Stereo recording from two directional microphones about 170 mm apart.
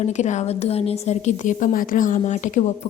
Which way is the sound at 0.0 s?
45° left (ahead or behind).